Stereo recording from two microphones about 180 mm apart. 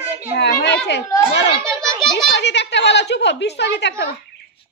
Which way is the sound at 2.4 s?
75° left (ahead or behind).